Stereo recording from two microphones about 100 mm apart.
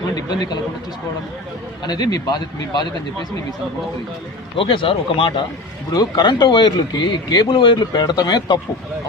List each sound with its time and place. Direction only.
0.2 s speech: 45° left (ahead or behind)
1.8 s speech: 45° left (ahead or behind)
4.5 s speech: 60° left (ahead or behind)
5.9 s speech: 40° left (ahead or behind)
7.4 s speech: 55° left (ahead or behind); by 8.5 s 40° left (ahead or behind)